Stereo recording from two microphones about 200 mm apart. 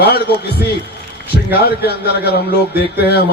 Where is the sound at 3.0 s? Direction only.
50° left (ahead or behind).